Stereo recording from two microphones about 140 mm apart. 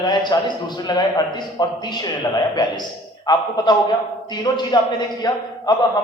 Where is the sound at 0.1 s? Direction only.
30° left (ahead or behind).